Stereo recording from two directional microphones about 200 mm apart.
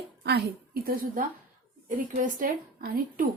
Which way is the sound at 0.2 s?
50° right (ahead or behind).